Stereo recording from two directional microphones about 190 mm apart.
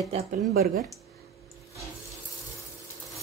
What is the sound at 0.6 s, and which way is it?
Speech, 50° right (ahead or behind).